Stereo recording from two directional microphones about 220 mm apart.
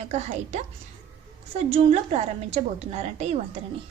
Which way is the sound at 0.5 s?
30° right (ahead or behind).